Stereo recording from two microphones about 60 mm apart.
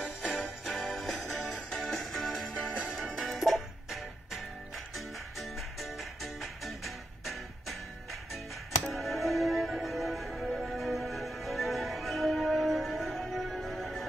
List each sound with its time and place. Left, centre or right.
0.0 s music: right
0.4 s music: centre